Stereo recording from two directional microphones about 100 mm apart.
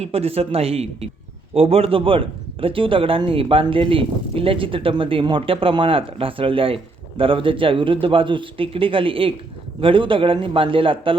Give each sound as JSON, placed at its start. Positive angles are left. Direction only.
{"t": 0.0, "sound": "speech", "side_deg": -80}
{"t": 1.5, "sound": "a man's voice", "side_deg": -75}